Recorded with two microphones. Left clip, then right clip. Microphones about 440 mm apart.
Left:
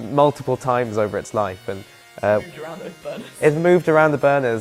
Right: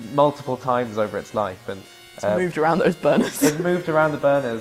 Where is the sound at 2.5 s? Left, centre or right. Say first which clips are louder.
Right 14 dB; right.